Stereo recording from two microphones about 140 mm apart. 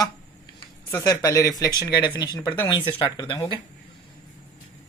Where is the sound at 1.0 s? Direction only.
20° left (ahead or behind).